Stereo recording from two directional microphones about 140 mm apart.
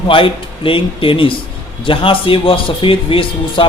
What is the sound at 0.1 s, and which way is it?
A man's voice, 40° left (ahead or behind).